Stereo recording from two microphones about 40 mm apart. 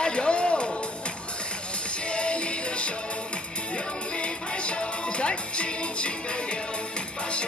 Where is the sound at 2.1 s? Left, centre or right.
Left.